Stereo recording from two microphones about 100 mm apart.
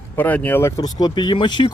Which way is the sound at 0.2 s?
15° left (ahead or behind).